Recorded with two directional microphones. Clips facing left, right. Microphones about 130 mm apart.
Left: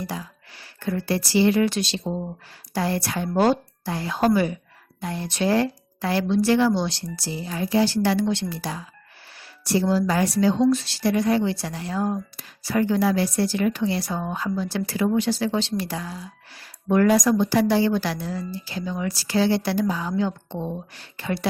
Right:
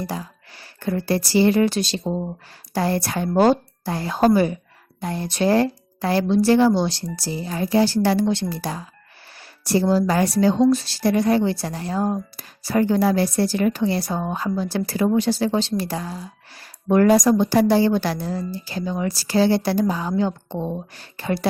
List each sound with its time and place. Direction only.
0.0 s speech: 40° right (ahead or behind)